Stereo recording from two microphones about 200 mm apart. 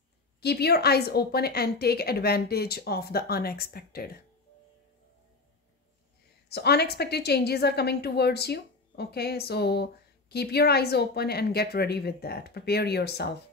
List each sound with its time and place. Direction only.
0.4 s a woman's voice: 55° left (ahead or behind)
6.5 s a woman's voice: 55° left (ahead or behind)